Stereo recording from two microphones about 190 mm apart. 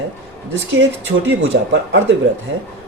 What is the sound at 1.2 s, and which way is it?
Speech, 90° right.